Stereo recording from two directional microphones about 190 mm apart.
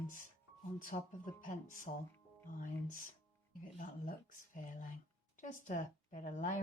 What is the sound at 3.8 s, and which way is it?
A woman's voice, 45° left (ahead or behind).